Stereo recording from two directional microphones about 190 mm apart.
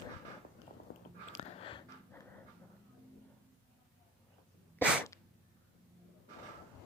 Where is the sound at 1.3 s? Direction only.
30° left (ahead or behind).